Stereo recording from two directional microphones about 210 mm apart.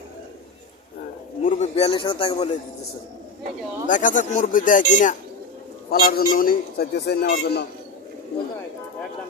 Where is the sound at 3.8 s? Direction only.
40° left (ahead or behind).